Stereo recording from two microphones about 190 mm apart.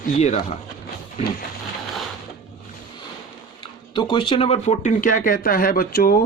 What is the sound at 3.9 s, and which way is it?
Speech, 25° left (ahead or behind).